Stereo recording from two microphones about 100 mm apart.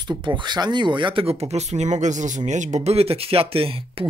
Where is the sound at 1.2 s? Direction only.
90° right.